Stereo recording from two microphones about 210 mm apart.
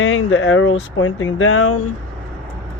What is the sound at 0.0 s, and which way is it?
Speech, 65° left (ahead or behind).